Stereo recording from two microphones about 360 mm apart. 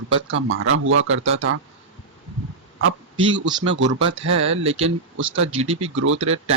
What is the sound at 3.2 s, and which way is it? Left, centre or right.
Speech, right.